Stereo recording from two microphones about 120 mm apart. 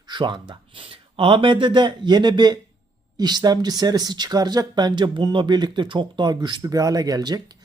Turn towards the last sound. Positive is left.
turn(degrees=-35)  # may be behind; listen again after turning